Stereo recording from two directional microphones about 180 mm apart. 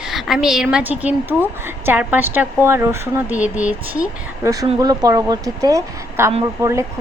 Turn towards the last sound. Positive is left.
turn(degrees=-15)  # may be behind; listen again after turning